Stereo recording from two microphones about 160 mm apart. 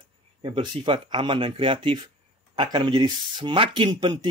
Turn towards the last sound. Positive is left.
turn(degrees=-30)  # may be behind; listen again after turning